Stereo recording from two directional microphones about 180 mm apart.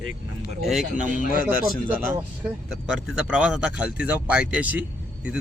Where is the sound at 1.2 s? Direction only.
50° left (ahead or behind).